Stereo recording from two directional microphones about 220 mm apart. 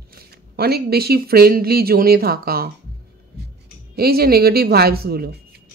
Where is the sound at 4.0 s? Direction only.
45° right (ahead or behind).